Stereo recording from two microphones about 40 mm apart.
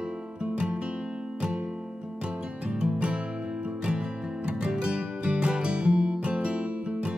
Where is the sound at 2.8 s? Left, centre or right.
Right.